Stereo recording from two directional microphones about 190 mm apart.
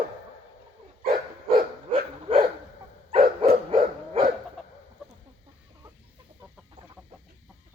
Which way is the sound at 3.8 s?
50° right (ahead or behind).